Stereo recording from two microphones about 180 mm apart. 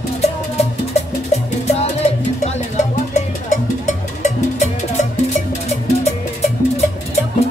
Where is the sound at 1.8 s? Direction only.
35° left (ahead or behind).